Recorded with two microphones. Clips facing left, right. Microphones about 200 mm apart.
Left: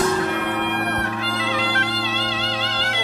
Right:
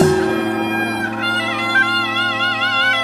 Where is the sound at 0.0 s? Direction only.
40° right (ahead or behind).